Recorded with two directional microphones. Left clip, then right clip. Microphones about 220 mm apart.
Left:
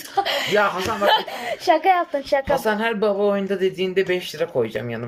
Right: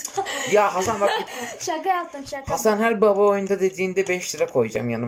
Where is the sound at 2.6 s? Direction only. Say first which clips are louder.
Right 2 dB; centre (ahead or behind).